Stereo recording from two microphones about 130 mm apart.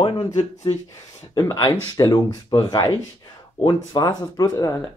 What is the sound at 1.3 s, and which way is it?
Speech, 30° left (ahead or behind).